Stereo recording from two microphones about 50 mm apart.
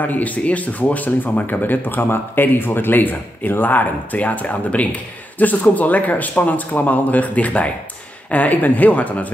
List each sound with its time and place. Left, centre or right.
0.0 s speech: left